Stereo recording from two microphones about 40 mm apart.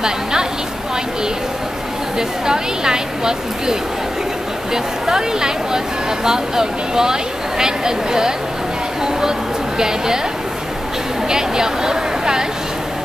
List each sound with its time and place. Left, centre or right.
0.0 s a sound: centre
2.1 s speech: centre
5.0 s speech: centre
9.8 s speech: centre
11.2 s a woman's voice: centre